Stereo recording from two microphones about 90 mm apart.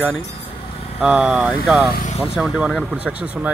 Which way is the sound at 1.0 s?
10° right (ahead or behind).